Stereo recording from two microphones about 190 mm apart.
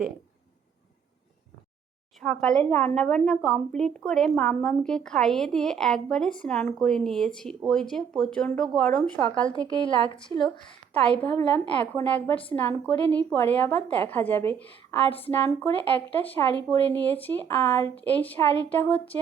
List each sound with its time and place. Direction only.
2.2 s speech: 5° left (ahead or behind)
9.3 s a woman's voice: 25° left (ahead or behind)
11.2 s a woman's voice: 10° left (ahead or behind)